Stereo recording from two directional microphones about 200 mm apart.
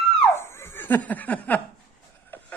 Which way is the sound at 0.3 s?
10° left (ahead or behind).